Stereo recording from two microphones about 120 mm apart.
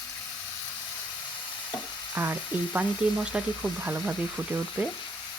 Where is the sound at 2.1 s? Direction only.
15° right (ahead or behind).